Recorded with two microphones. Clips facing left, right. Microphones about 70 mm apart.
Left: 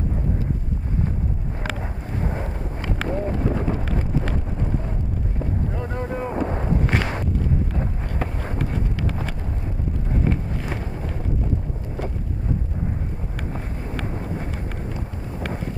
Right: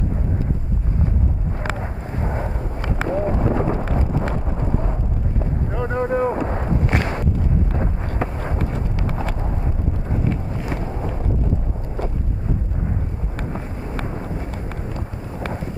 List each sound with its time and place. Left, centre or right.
1.7 s vehicle: right
3.0 s a sound: right
5.9 s boat: right
6.4 s a sound: right
7.7 s wind noise: right
8.5 s horse: right